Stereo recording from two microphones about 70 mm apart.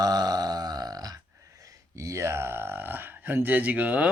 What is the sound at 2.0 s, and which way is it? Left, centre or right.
Speech, right.